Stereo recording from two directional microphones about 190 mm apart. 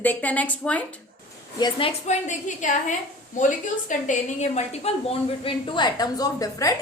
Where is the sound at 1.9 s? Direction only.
40° left (ahead or behind).